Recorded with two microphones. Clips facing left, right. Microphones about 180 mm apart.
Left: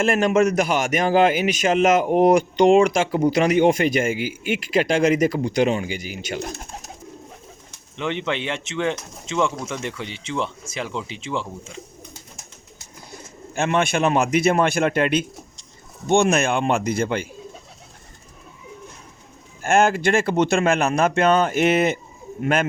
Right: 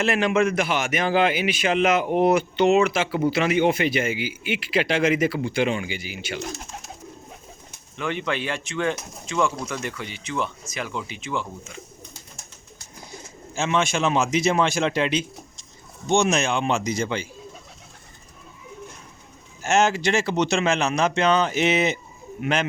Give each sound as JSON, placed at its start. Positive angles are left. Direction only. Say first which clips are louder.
{"t": 0.0, "sound": "a man's voice", "louder": "left 3 dB", "side_deg": 45}
{"t": 6.4, "sound": "a man's voice", "louder": "left 2 dB", "side_deg": 60}
{"t": 7.9, "sound": "speech", "louder": "left 2 dB", "side_deg": 20}
{"t": 13.5, "sound": "a man's voice", "louder": "left 2 dB", "side_deg": 55}
{"t": 19.6, "sound": "a man's voice", "louder": "left 3 dB", "side_deg": 55}